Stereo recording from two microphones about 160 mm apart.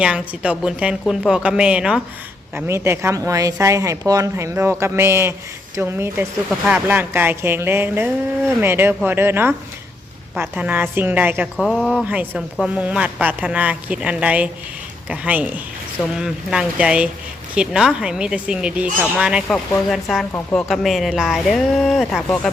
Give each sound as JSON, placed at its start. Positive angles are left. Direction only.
{"t": 0.0, "sound": "speech", "side_deg": -5}
{"t": 11.5, "sound": "speech", "side_deg": 5}
{"t": 12.0, "sound": "speech", "side_deg": -10}